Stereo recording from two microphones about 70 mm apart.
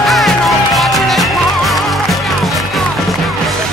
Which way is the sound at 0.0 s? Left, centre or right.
Centre.